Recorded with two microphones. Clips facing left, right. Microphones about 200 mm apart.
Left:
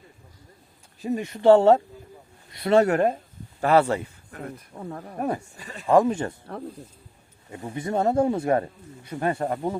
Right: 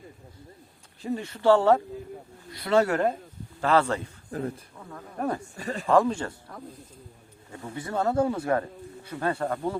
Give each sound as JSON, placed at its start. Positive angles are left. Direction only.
{"t": 1.0, "sound": "speech", "side_deg": 15}
{"t": 4.3, "sound": "speech", "side_deg": -30}
{"t": 4.8, "sound": "speech", "side_deg": 40}
{"t": 5.5, "sound": "speech", "side_deg": -40}
{"t": 5.9, "sound": "speech", "side_deg": 20}
{"t": 7.7, "sound": "speech", "side_deg": 20}